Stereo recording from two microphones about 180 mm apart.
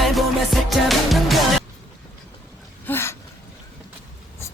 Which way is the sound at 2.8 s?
15° left (ahead or behind).